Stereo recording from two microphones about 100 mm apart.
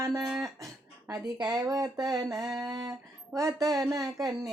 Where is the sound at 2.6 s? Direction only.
35° right (ahead or behind).